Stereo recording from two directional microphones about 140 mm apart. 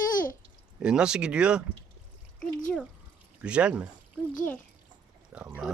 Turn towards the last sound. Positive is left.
turn(degrees=-5)  # may be behind; listen again after turning